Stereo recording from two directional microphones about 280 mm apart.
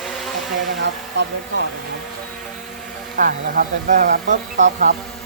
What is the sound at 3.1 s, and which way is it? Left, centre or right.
Speech, right.